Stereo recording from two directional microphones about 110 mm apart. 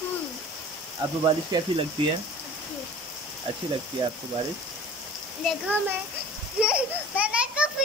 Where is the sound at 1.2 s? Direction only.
50° right (ahead or behind).